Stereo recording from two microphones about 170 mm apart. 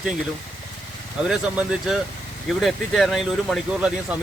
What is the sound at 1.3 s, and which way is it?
Speech, centre (ahead or behind).